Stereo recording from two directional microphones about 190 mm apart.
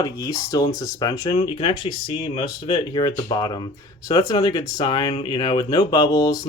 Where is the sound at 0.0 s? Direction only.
20° left (ahead or behind).